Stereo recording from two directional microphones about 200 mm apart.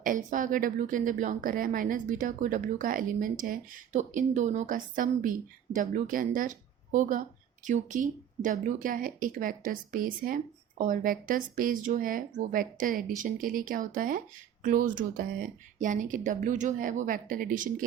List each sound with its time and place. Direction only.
0.0 s a woman's voice: 40° right (ahead or behind)